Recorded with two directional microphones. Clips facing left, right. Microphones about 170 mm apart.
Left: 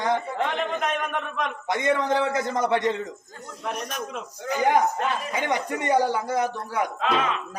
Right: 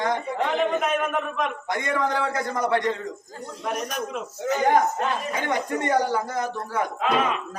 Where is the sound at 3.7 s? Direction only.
5° right (ahead or behind).